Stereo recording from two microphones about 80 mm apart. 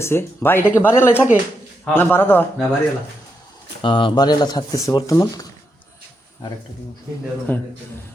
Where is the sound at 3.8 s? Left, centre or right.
Left.